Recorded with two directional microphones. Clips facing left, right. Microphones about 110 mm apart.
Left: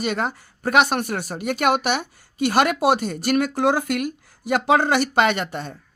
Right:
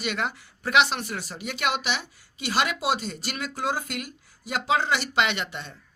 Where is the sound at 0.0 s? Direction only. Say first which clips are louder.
Left 5 dB; 40° left (ahead or behind).